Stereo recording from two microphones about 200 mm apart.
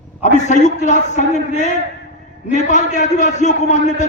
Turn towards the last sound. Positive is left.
turn(degrees=35)  # may be behind; listen again after turning